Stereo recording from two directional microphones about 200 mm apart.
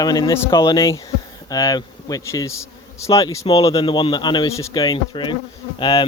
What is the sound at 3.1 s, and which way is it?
Insect, 30° left (ahead or behind).